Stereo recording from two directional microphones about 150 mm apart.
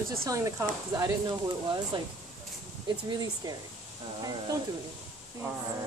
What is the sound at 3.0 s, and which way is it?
Speech, 30° right (ahead or behind).